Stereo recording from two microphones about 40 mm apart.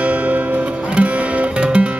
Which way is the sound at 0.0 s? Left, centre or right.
Right.